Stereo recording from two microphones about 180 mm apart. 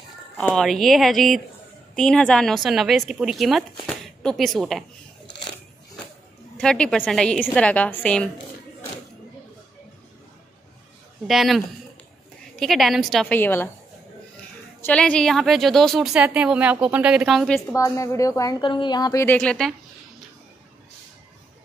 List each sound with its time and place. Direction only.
0.4 s a woman's voice: centre (ahead or behind)
6.5 s a woman's voice: 5° left (ahead or behind)
11.2 s a woman's voice: centre (ahead or behind)
14.8 s a woman's voice: 5° left (ahead or behind)
17.6 s a woman's voice: 15° left (ahead or behind)
19.2 s a woman's voice: 5° left (ahead or behind)